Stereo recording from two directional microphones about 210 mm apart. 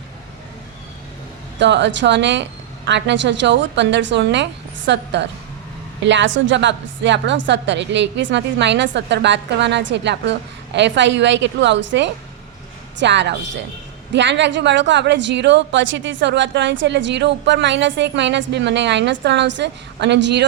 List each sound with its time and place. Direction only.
1.5 s a woman's voice: 55° right (ahead or behind)